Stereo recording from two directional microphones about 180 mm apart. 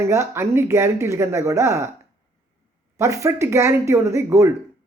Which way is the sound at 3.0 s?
15° right (ahead or behind).